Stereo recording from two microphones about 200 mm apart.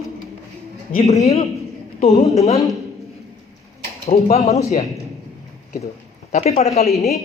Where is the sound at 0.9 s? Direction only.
40° left (ahead or behind).